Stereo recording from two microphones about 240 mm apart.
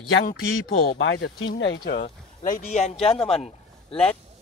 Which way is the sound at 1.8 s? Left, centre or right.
Left.